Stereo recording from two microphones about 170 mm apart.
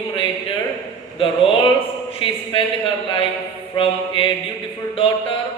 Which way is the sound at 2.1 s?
35° left (ahead or behind).